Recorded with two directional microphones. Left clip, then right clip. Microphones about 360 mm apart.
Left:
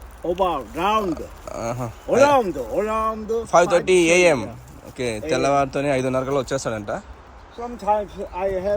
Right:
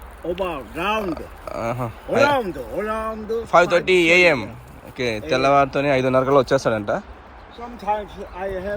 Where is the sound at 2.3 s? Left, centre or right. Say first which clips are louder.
Left 4 dB; centre.